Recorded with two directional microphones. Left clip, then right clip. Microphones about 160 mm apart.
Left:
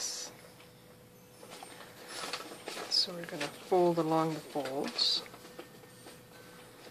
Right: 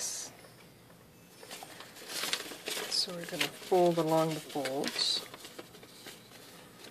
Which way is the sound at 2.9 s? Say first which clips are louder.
Left 3 dB; 20° right (ahead or behind).